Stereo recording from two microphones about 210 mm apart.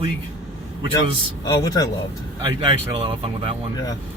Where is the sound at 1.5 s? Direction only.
15° left (ahead or behind).